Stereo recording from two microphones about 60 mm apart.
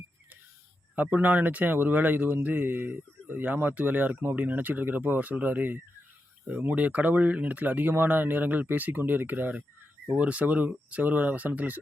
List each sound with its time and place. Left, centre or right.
1.0 s speech: right